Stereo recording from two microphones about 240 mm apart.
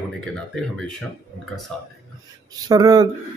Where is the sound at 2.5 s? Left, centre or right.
Centre.